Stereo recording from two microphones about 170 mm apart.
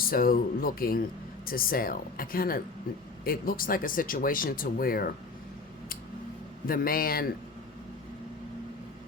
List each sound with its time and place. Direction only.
0.1 s speech: 60° left (ahead or behind)
6.7 s speech: 60° left (ahead or behind)